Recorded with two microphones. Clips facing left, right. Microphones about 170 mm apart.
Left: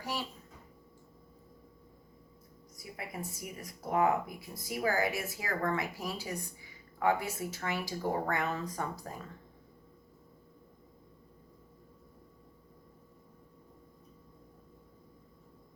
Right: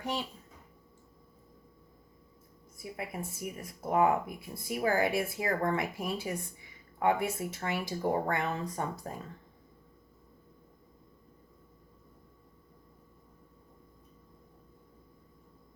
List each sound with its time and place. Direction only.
2.7 s speech: 25° right (ahead or behind)